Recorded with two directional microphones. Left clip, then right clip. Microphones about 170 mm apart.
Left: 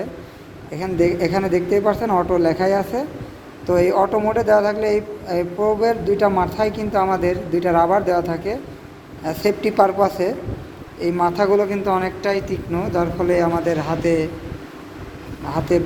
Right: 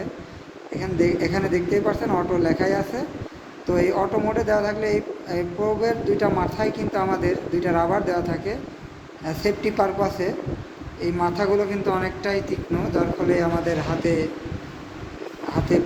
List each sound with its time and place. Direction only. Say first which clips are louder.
0.8 s a man's voice: left 3 dB; 45° left (ahead or behind)